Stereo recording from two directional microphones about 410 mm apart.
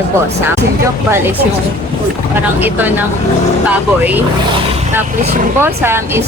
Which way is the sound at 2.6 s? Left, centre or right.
Centre.